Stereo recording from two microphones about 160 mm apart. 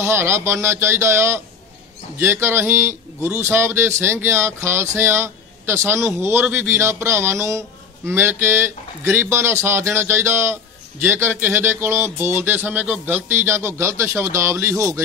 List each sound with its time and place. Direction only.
0.0 s speech: 15° right (ahead or behind)